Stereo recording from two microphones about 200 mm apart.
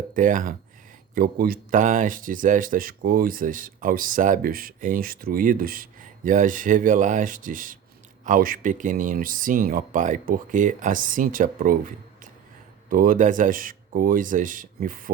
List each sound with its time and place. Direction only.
0.1 s speech: 40° right (ahead or behind)
12.9 s speech: 45° right (ahead or behind)